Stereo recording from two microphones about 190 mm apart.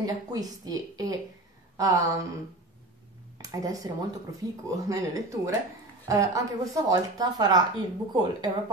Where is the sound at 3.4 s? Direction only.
20° right (ahead or behind).